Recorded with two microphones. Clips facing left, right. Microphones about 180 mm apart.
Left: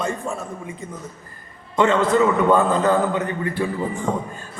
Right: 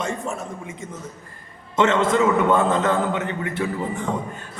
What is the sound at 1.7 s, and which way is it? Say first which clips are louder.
A man's voice: left 1 dB; 20° right (ahead or behind).